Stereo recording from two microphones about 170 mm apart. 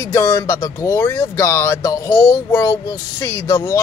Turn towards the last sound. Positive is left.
turn(degrees=20)  # may be behind; listen again after turning